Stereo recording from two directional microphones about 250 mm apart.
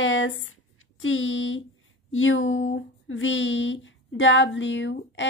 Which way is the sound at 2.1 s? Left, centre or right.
Left.